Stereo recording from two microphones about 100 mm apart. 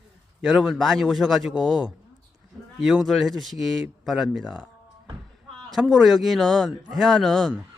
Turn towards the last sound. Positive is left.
turn(degrees=0)  # may be behind; listen again after turning